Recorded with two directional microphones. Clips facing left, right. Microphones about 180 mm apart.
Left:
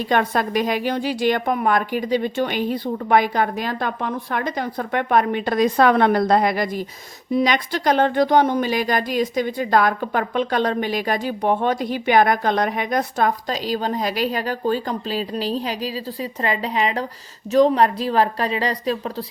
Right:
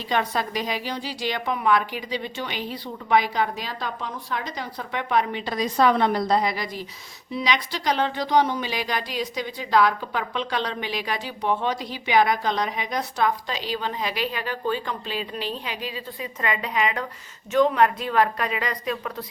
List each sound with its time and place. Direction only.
0.1 s a woman's voice: 55° left (ahead or behind); by 19.2 s 30° left (ahead or behind)